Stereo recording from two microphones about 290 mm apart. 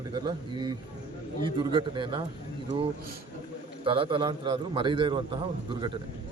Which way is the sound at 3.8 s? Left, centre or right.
Centre.